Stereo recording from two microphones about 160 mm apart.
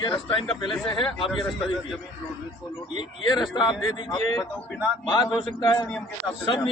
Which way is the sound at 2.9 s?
30° left (ahead or behind).